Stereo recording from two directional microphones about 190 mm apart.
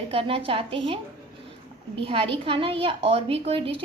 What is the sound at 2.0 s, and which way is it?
A woman's voice, 30° right (ahead or behind).